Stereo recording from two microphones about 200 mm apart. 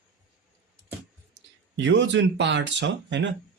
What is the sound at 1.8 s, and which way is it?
Speech, 65° right (ahead or behind).